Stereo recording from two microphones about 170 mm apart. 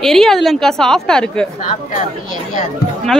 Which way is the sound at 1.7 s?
45° left (ahead or behind).